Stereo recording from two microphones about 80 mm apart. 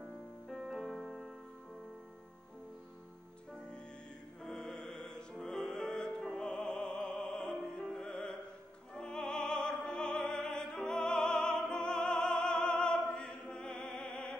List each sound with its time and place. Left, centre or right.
0.5 s music: centre
4.5 s music: centre
8.9 s opera: centre